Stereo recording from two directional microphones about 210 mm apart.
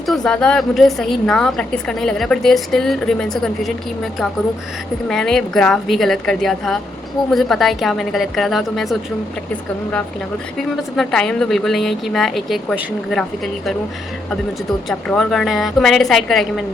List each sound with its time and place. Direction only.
0.3 s a woman's voice: 5° left (ahead or behind)
5.0 s a woman's voice: centre (ahead or behind)
10.6 s a woman's voice: centre (ahead or behind)
14.8 s a woman's voice: 5° left (ahead or behind)